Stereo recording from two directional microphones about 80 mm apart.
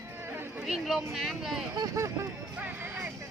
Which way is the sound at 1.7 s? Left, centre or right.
Right.